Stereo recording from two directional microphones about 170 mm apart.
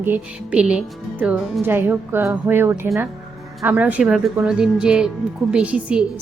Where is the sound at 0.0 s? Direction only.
10° right (ahead or behind).